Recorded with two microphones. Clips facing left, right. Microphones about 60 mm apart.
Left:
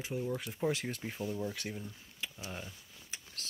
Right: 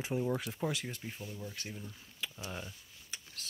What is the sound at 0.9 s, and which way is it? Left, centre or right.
Speech, left.